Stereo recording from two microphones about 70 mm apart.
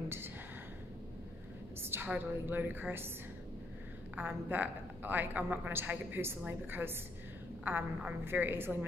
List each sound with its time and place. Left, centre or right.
1.8 s a sound: right
2.1 s a woman's voice: right
4.2 s a woman's voice: right